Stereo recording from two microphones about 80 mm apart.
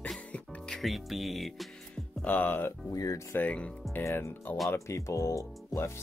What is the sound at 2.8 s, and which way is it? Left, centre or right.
Speech, left.